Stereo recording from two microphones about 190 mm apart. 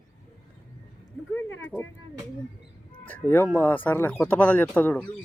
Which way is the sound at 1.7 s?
5° right (ahead or behind).